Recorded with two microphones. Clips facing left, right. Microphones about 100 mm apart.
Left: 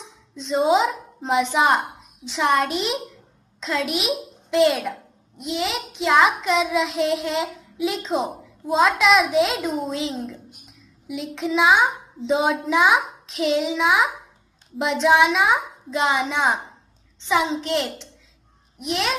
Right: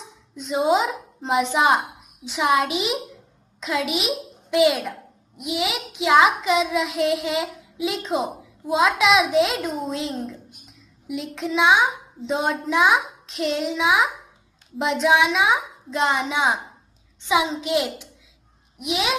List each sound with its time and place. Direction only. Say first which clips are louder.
0.0 s a woman's voice: even; centre (ahead or behind)